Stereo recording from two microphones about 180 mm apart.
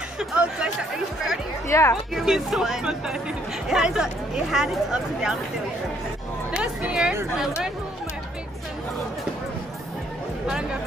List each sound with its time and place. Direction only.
0.2 s speech: 5° right (ahead or behind)
1.7 s a woman's voice: 15° left (ahead or behind)
2.1 s speech: centre (ahead or behind)
6.5 s speech: 5° right (ahead or behind)
10.4 s speech: 5° right (ahead or behind)